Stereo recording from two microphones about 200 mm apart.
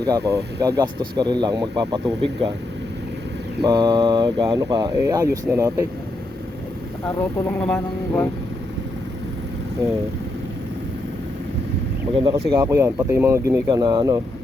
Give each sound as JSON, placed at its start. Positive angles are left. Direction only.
{"t": 0.0, "sound": "speech", "side_deg": -15}
{"t": 3.6, "sound": "speech", "side_deg": -20}
{"t": 7.4, "sound": "speech", "side_deg": 10}
{"t": 12.1, "sound": "speech", "side_deg": -25}